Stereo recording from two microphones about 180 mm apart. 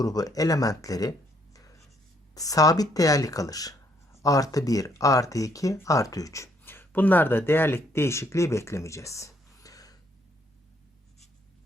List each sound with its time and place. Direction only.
0.0 s speech: 20° left (ahead or behind)
2.3 s speech: 20° left (ahead or behind)